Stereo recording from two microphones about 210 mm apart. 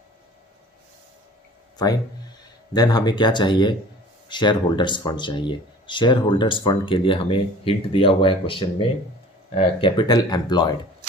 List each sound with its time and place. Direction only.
2.7 s speech: 20° left (ahead or behind)